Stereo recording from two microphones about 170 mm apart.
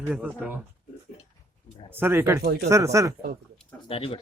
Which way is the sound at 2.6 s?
20° right (ahead or behind).